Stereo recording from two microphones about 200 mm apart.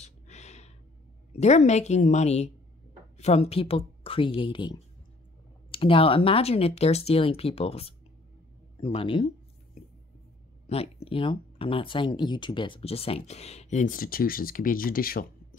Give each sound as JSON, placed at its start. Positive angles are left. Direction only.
{"t": 0.0, "sound": "gasp", "side_deg": 35}
{"t": 1.3, "sound": "speech", "side_deg": 35}
{"t": 10.7, "sound": "speech", "side_deg": 30}